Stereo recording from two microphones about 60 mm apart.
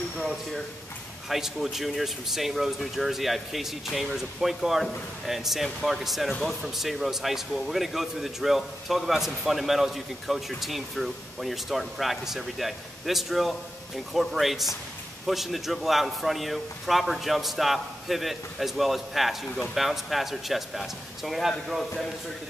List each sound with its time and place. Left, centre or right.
0.2 s speech: centre